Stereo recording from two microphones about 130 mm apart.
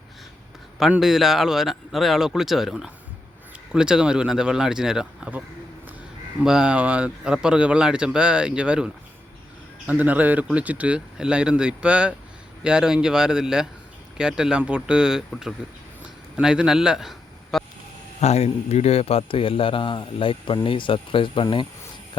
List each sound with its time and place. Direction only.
0.8 s speech: 5° right (ahead or behind)
6.4 s a man's voice: 5° right (ahead or behind)
18.2 s a man's voice: 55° left (ahead or behind); by 21.7 s 40° left (ahead or behind)